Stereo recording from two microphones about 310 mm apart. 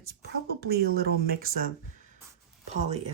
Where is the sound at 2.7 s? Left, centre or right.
Right.